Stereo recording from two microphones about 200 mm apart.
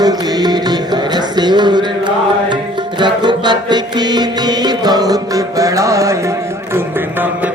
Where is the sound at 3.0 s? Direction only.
20° right (ahead or behind).